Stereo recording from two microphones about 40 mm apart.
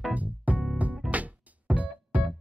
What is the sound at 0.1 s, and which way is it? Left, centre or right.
Music, right.